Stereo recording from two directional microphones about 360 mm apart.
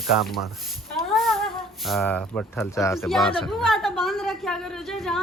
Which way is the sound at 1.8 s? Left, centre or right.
Centre.